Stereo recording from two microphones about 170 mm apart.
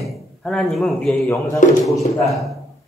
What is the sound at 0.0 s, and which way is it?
A man's voice, centre (ahead or behind).